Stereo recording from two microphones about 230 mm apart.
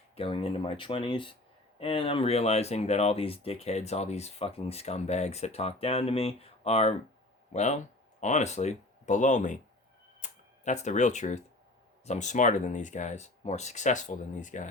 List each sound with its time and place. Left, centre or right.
0.2 s speech: left